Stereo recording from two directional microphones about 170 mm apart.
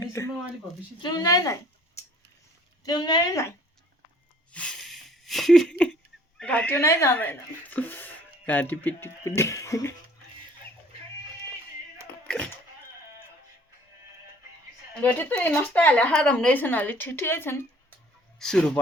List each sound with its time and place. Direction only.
0.0 s a sound: 15° left (ahead or behind)
1.0 s a woman's voice: 25° left (ahead or behind)
2.8 s a woman's voice: 25° left (ahead or behind)
4.5 s wheeze: 5° left (ahead or behind)
6.4 s speech: 5° left (ahead or behind)
12.2 s a sound: 5° left (ahead or behind)
15.0 s speech: 10° left (ahead or behind)